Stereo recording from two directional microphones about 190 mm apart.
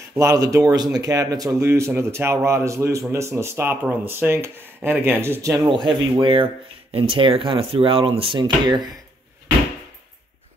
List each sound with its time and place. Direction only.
0.1 s speech: 15° right (ahead or behind)